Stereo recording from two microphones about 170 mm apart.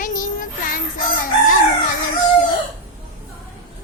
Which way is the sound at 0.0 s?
50° left (ahead or behind).